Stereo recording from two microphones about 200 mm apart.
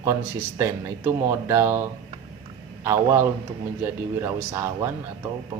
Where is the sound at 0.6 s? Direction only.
15° right (ahead or behind).